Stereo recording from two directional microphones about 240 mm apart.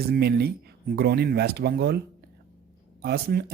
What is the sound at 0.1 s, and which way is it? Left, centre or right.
Speech, right.